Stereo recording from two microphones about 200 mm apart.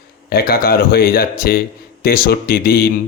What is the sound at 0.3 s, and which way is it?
A man's voice, 50° left (ahead or behind).